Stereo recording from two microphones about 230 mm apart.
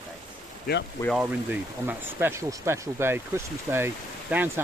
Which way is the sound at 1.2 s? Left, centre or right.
Centre.